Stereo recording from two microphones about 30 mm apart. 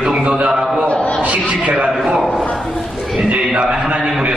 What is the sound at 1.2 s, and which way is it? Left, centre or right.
Speech, right.